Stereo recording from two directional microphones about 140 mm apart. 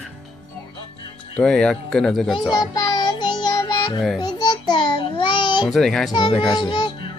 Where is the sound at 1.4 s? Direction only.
5° left (ahead or behind).